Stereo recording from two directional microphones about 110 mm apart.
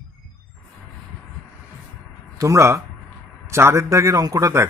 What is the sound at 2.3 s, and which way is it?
Speech, 30° right (ahead or behind).